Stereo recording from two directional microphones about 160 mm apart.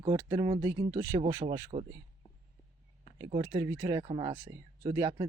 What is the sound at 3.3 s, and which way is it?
Speech, 30° right (ahead or behind).